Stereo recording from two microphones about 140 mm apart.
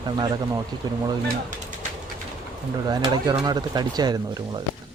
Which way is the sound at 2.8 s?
30° right (ahead or behind).